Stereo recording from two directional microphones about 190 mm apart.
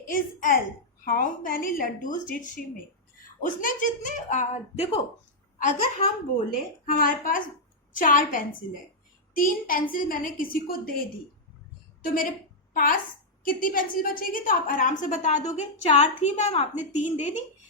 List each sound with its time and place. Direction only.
0.1 s a woman's voice: 45° left (ahead or behind)
12.0 s a woman's voice: 45° left (ahead or behind)